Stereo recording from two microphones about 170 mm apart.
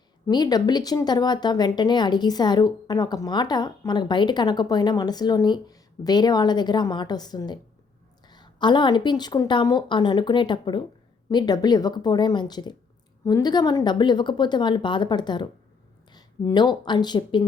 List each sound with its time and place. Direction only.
0.3 s speech: 25° left (ahead or behind)